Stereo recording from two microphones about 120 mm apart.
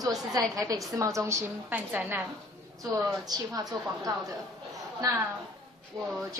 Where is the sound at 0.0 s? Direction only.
30° right (ahead or behind); by 2.2 s 15° right (ahead or behind).